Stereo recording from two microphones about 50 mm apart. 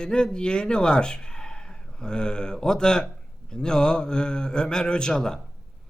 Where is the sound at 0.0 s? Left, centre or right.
Centre.